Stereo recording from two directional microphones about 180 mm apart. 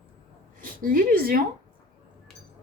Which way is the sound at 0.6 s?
50° right (ahead or behind).